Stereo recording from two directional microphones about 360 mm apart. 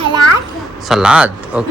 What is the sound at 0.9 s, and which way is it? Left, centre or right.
Speech, centre.